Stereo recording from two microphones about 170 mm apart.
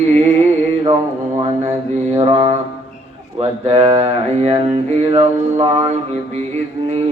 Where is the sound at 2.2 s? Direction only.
35° right (ahead or behind).